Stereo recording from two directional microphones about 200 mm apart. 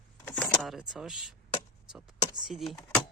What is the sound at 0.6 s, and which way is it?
Speech, centre (ahead or behind).